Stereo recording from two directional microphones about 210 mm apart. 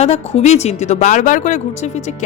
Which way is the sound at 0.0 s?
30° left (ahead or behind).